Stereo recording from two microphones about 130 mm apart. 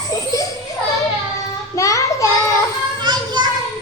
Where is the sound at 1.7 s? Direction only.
25° left (ahead or behind).